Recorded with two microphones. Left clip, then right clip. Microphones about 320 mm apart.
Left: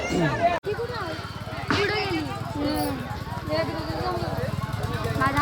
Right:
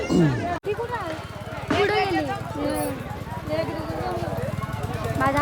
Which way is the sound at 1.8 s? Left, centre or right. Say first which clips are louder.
Right 6 dB; centre.